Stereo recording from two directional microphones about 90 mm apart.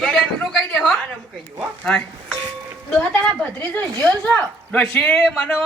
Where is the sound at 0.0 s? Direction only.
5° left (ahead or behind).